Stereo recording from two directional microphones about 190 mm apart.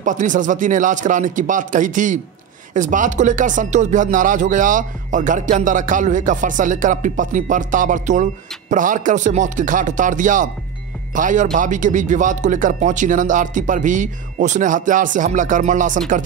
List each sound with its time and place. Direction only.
0.0 s speech: 40° right (ahead or behind)